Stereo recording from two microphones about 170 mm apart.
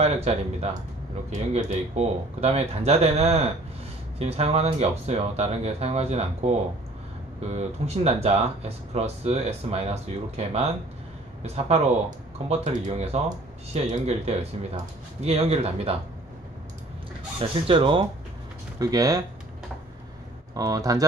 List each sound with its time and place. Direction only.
0.0 s speech: 40° right (ahead or behind)
7.5 s speech: 40° right (ahead or behind)
17.4 s speech: 30° right (ahead or behind)
20.5 s speech: 20° right (ahead or behind)